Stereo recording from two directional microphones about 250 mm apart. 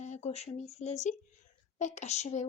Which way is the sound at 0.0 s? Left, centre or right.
Left.